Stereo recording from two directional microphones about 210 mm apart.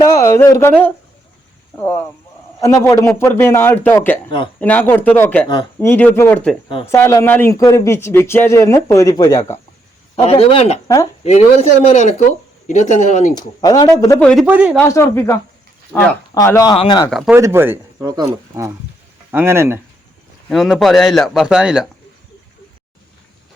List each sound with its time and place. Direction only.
0.0 s a man's voice: 15° left (ahead or behind)
5.5 s speech: 20° left (ahead or behind)
5.9 s a man's voice: 10° left (ahead or behind)
10.2 s speech: 30° left (ahead or behind)
13.3 s speech: 20° left (ahead or behind)
14.2 s a man's voice: 5° left (ahead or behind)
14.4 s a man's voice: 5° right (ahead or behind)
14.8 s a man's voice: 15° left (ahead or behind)
15.9 s a man's voice: 5° left (ahead or behind)
16.3 s a man's voice: 15° left (ahead or behind)
17.1 s a man's voice: centre (ahead or behind)
17.3 s speech: 10° right (ahead or behind)
20.5 s a man's voice: centre (ahead or behind)